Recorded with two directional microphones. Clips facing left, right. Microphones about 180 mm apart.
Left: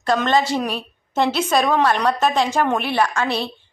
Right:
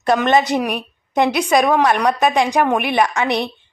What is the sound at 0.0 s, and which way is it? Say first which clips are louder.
A woman's voice: right 3 dB; 20° right (ahead or behind).